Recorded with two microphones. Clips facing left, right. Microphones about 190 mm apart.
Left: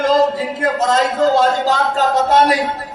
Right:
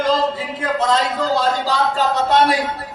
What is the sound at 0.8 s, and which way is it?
A man's voice, 45° left (ahead or behind).